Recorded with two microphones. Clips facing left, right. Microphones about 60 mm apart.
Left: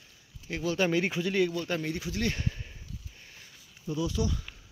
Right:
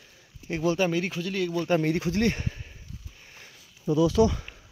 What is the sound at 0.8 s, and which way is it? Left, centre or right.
Speech, centre.